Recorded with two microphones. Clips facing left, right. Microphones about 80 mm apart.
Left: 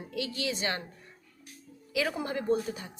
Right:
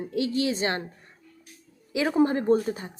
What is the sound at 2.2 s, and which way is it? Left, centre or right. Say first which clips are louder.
Speech: right 8 dB; right.